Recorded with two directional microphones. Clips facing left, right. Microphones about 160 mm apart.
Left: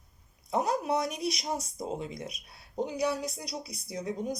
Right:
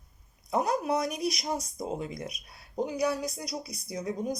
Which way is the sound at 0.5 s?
30° left (ahead or behind).